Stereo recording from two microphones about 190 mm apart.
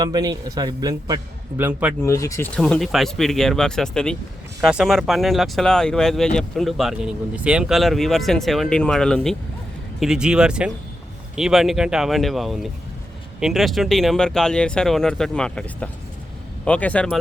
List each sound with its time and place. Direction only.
0.0 s a man's voice: 20° right (ahead or behind)
2.0 s speech: 15° left (ahead or behind)
2.6 s speech: centre (ahead or behind)